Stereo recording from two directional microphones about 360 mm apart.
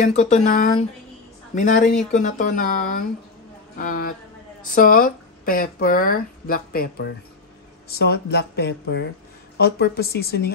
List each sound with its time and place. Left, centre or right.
0.1 s speech: centre